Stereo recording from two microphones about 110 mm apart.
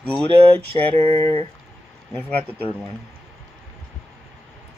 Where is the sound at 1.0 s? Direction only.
60° right (ahead or behind).